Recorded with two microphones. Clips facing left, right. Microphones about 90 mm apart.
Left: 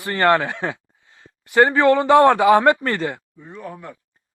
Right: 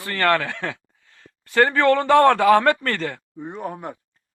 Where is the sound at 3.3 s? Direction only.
20° right (ahead or behind).